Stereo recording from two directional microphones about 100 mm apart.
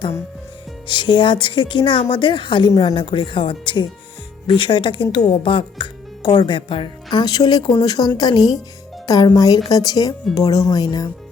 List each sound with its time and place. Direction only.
0.9 s a woman's voice: 50° left (ahead or behind)